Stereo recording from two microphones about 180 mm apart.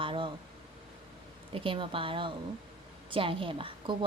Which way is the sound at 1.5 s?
30° right (ahead or behind).